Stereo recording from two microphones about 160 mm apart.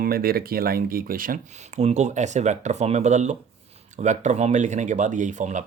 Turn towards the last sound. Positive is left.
turn(degrees=-50)  # may be behind; listen again after turning